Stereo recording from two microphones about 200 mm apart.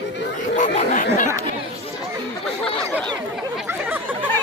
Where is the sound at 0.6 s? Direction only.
40° left (ahead or behind).